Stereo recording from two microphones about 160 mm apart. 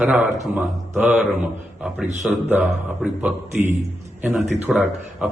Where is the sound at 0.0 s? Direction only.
10° right (ahead or behind).